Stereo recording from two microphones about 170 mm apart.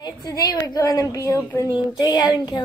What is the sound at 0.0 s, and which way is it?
A woman's voice, 20° left (ahead or behind).